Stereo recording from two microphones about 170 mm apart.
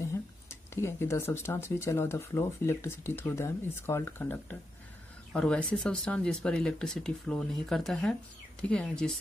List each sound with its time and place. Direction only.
0.0 s speech: 15° left (ahead or behind)